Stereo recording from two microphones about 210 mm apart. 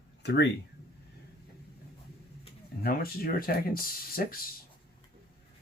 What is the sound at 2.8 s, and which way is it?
Speech, 45° left (ahead or behind).